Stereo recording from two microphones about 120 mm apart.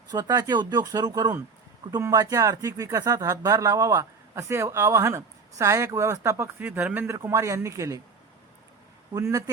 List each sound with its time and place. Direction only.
0.1 s speech: 35° right (ahead or behind)
9.1 s speech: 25° right (ahead or behind)